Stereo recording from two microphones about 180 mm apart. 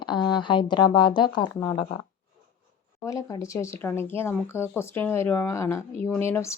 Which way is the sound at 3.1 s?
20° left (ahead or behind).